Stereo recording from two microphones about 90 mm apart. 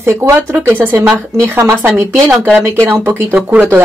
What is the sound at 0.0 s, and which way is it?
Speech, 30° right (ahead or behind).